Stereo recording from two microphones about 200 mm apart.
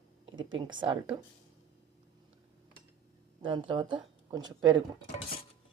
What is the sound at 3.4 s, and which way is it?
Speech, 25° right (ahead or behind).